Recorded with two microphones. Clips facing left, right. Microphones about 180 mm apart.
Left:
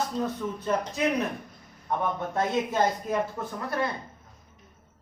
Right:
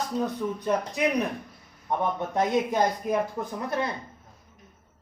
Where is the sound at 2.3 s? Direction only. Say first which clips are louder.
Right 3 dB; 15° right (ahead or behind).